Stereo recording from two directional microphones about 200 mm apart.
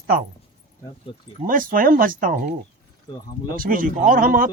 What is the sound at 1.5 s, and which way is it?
Speech, 45° right (ahead or behind).